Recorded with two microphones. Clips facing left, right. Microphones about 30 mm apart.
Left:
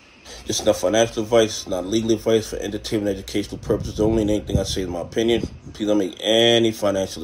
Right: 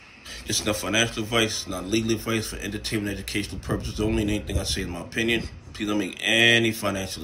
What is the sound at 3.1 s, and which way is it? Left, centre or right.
Speech, centre.